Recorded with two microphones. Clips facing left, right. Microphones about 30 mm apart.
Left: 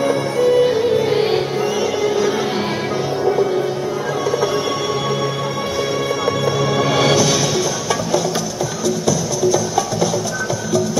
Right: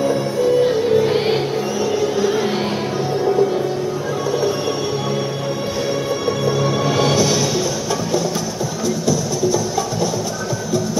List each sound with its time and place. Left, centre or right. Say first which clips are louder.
0.0 s music: left 1 dB; left
0.7 s music: even; centre
6.9 s music: left 3 dB; left
8.8 s music: left 1 dB; left